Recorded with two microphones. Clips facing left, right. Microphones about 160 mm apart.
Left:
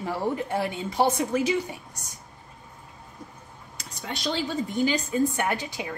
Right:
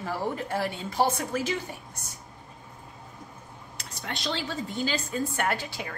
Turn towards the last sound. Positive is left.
turn(degrees=15)  # may be behind; listen again after turning